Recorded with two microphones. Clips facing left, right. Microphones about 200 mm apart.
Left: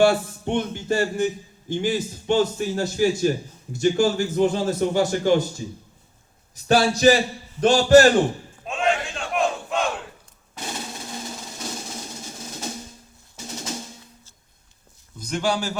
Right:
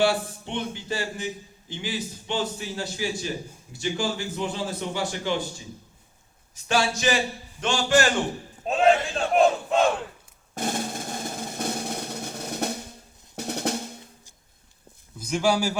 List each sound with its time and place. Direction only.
0.0 s a man's voice: 50° left (ahead or behind)
6.7 s a man's voice: 40° left (ahead or behind)
8.6 s battle cry: 35° right (ahead or behind)
10.5 s drum roll: 50° right (ahead or behind)
13.3 s drum: 60° right (ahead or behind)
15.2 s speech: 5° right (ahead or behind)